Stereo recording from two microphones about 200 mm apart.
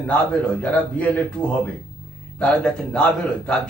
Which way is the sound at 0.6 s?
5° left (ahead or behind).